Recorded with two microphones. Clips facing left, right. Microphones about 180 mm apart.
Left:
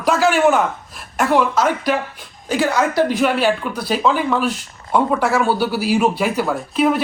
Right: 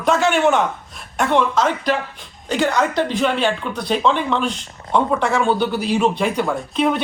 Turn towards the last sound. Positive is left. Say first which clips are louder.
# left 2 dB
turn(degrees=5)  # may be behind; listen again after turning